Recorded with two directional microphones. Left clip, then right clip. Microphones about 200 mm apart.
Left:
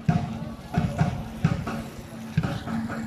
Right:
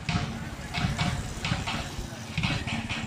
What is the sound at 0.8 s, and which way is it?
Music, 55° left (ahead or behind).